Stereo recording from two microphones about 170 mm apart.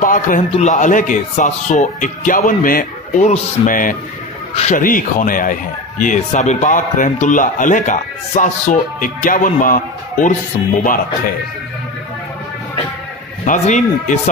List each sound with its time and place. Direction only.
0.0 s speech: 50° left (ahead or behind)
13.5 s speech: 50° left (ahead or behind)